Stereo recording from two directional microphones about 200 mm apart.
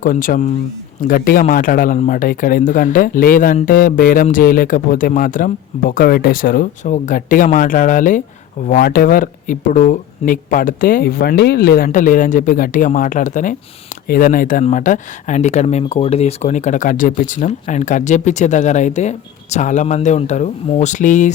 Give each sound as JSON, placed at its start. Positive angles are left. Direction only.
{"t": 0.0, "sound": "speech", "side_deg": 45}